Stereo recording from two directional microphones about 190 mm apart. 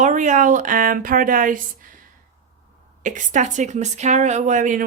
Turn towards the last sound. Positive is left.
turn(degrees=-45)  # may be behind; listen again after turning